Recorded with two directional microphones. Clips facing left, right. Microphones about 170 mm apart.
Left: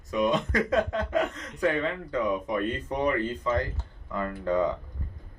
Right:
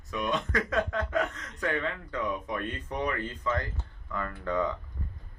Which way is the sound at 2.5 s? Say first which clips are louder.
Left 5 dB; 30° left (ahead or behind).